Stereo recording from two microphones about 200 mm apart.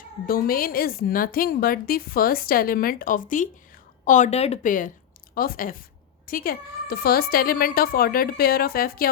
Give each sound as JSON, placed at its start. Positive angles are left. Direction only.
{"t": 0.3, "sound": "a woman's voice", "side_deg": 45}